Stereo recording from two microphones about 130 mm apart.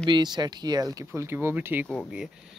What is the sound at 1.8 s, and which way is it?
Speech, 5° left (ahead or behind).